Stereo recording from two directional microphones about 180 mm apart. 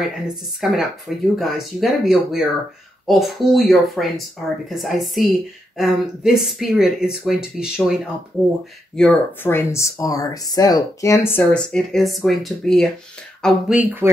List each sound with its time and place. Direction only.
0.6 s speech: centre (ahead or behind)
8.9 s speech: 10° left (ahead or behind); by 14.1 s 10° right (ahead or behind)